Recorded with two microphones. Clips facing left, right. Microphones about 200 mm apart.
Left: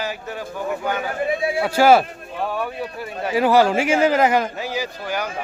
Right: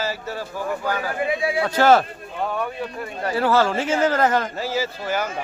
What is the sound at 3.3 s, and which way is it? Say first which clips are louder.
Speech: left 4 dB; 15° left (ahead or behind).